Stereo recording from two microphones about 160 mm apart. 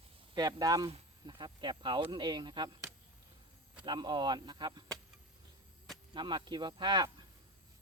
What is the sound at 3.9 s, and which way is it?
Speech, 25° right (ahead or behind).